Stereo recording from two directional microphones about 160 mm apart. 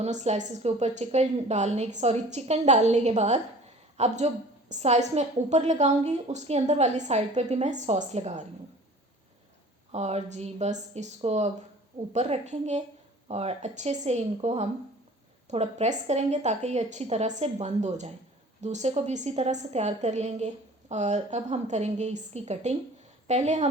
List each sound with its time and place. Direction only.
0.0 s a woman's voice: 45° right (ahead or behind)
9.9 s a woman's voice: 40° right (ahead or behind)